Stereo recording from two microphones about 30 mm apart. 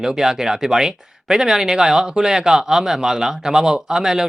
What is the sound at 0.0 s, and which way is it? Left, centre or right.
Speech, centre.